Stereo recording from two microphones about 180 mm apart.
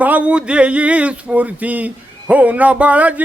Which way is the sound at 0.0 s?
10° right (ahead or behind).